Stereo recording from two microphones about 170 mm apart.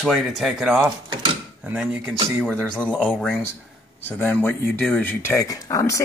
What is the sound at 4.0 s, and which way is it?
A man's voice, 10° left (ahead or behind).